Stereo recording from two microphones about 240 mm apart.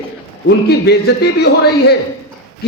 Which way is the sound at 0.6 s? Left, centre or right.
Left.